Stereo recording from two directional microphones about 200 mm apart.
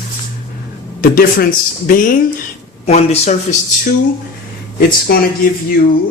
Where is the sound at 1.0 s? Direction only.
45° left (ahead or behind).